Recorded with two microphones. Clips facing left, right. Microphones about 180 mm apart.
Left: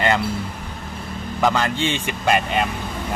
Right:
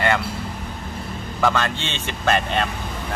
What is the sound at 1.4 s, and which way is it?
A man's voice, 15° left (ahead or behind).